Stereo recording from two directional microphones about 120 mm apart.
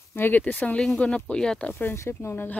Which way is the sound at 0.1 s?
15° left (ahead or behind).